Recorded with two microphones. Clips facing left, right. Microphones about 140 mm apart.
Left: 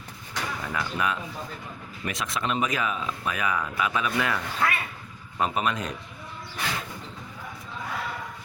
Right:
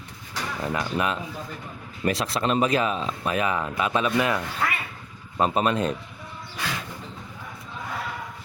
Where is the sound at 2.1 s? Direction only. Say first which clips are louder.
Right 5 dB; 35° right (ahead or behind).